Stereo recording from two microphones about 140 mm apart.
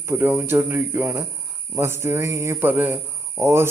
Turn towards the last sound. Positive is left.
turn(degrees=-20)  # may be behind; listen again after turning